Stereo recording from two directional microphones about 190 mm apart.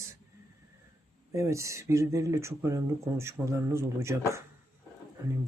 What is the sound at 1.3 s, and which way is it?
Speech, 15° right (ahead or behind).